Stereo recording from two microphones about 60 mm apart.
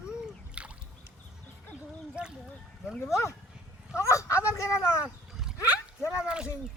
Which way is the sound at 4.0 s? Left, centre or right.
Left.